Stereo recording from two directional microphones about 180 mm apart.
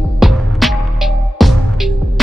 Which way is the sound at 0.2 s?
Centre (ahead or behind).